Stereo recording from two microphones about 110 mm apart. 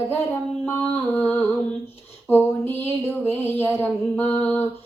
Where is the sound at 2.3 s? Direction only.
20° left (ahead or behind).